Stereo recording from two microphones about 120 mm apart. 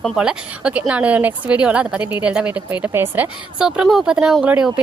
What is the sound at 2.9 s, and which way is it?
Speech, 20° right (ahead or behind).